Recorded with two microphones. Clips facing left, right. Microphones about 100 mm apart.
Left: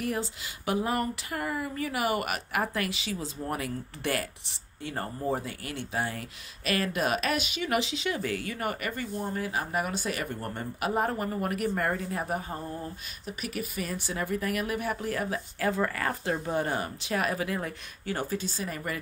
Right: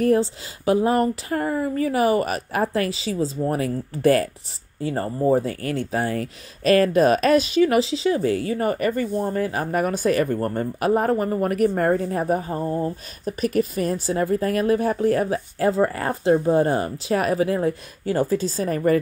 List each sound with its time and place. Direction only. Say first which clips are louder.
0.0 s speech: right 13 dB; 35° right (ahead or behind)